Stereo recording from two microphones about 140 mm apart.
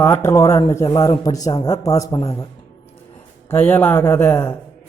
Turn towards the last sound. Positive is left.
turn(degrees=15)  # may be behind; listen again after turning